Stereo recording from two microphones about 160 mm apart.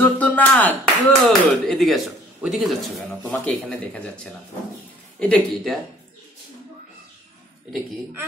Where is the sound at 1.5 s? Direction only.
Centre (ahead or behind).